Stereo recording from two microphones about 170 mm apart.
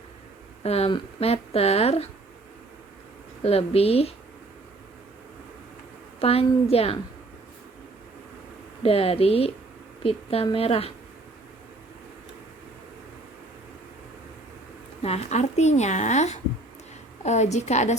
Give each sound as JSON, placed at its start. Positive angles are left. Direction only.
{"t": 0.6, "sound": "speech", "side_deg": 35}
{"t": 3.4, "sound": "speech", "side_deg": 35}
{"t": 6.1, "sound": "speech", "side_deg": 35}
{"t": 8.8, "sound": "speech", "side_deg": 35}
{"t": 15.0, "sound": "speech", "side_deg": 40}